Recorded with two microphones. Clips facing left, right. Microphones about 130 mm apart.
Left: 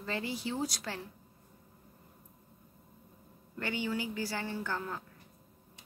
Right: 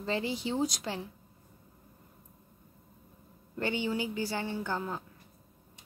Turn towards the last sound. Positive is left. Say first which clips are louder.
# right 3 dB
turn(degrees=-20)  # may be behind; listen again after turning